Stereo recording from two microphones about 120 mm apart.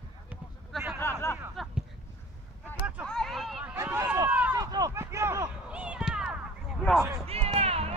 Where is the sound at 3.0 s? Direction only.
5° left (ahead or behind).